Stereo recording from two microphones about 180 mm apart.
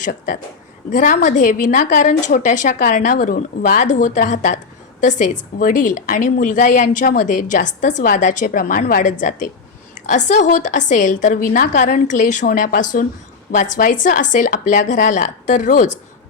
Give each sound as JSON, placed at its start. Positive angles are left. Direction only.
{"t": 0.0, "sound": "a woman's voice", "side_deg": 45}